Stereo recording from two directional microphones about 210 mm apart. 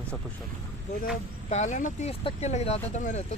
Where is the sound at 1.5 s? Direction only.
35° left (ahead or behind).